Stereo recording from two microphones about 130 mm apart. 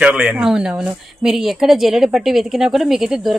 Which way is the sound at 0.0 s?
10° right (ahead or behind).